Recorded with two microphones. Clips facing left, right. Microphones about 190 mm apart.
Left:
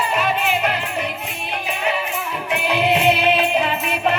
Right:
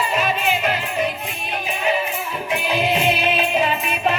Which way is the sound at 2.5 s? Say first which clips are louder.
Left 2 dB; 65° left (ahead or behind).